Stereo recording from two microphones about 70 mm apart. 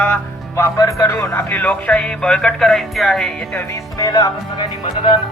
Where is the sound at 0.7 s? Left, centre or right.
Left.